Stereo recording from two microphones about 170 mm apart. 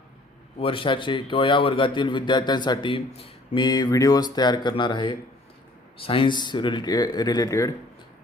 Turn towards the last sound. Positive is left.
turn(degrees=20)  # may be behind; listen again after turning